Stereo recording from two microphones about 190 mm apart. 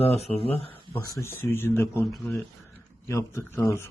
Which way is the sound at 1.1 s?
15° left (ahead or behind).